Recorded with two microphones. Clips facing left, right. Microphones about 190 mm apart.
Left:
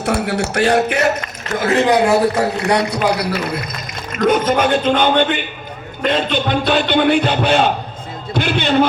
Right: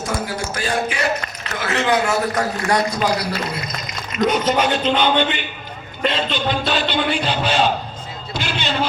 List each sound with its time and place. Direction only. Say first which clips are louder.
0.0 s speech: left 6 dB; 65° left (ahead or behind)
1.5 s a man's voice: left 8 dB; 50° left (ahead or behind)
1.8 s a man's voice: left 4 dB; 35° left (ahead or behind)
2.4 s a man's voice: left 3 dB; 65° left (ahead or behind)